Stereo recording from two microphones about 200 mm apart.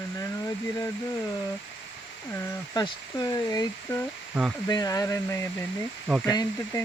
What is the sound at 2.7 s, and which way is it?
Speech, 20° left (ahead or behind).